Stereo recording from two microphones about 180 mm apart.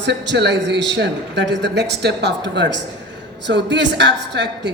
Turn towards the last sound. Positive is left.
turn(degrees=-75)  # may be behind; listen again after turning